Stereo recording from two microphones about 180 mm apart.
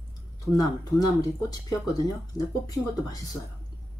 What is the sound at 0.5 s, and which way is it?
Speech, 20° left (ahead or behind).